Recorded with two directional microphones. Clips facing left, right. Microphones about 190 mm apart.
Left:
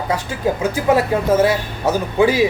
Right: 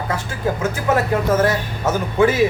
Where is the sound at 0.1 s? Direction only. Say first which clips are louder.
Left 4 dB; 15° left (ahead or behind).